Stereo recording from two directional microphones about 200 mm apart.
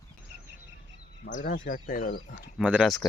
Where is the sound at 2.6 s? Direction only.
5° right (ahead or behind).